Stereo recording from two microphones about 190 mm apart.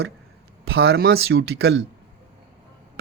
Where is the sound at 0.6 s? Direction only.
60° right (ahead or behind).